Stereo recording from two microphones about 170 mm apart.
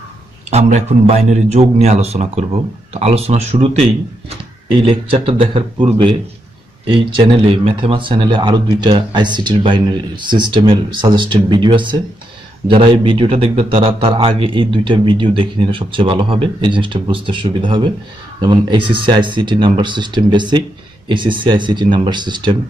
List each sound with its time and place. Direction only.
0.5 s a man's voice: 40° right (ahead or behind)